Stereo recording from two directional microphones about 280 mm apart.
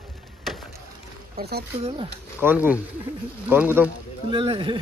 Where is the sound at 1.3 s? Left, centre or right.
Right.